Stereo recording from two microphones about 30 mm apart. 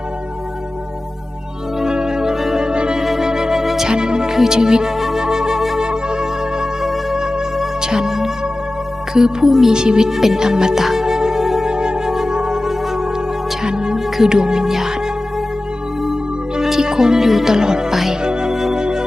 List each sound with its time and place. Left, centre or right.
1.8 s music: right
2.6 s music: right
3.0 s music: centre
4.3 s speech: centre
4.9 s flute: centre
5.2 s flute: right
5.8 s music: right
10.1 s speech: centre
10.4 s music: right
11.7 s music: right
14.7 s music: centre
16.6 s music: centre
17.9 s music: centre
18.2 s organ: right